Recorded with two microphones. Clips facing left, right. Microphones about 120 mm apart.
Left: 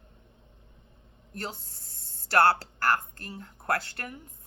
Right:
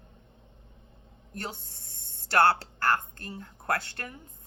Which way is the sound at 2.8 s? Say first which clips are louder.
Even; 25° right (ahead or behind).